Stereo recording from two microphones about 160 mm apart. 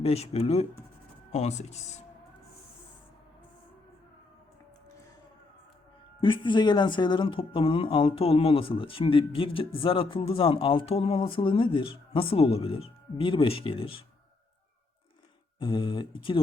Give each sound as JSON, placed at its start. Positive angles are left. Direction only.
{"t": 0.0, "sound": "speech", "side_deg": 40}
{"t": 6.1, "sound": "speech", "side_deg": 30}
{"t": 15.5, "sound": "speech", "side_deg": 30}